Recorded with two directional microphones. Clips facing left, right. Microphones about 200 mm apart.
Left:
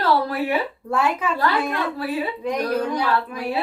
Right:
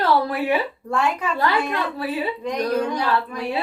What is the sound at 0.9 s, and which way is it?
Speech, 5° left (ahead or behind).